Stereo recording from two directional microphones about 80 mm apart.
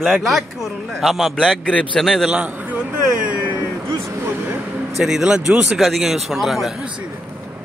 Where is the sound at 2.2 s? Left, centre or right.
Centre.